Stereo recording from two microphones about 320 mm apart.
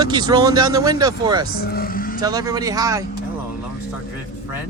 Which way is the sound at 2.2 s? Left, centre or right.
Centre.